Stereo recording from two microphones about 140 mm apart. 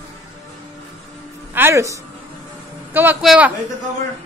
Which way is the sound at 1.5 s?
20° right (ahead or behind).